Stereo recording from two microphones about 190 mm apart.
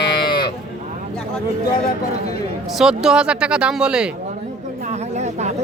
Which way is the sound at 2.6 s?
Centre (ahead or behind).